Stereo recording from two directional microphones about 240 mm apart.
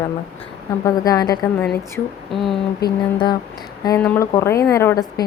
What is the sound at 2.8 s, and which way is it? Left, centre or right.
Music, left.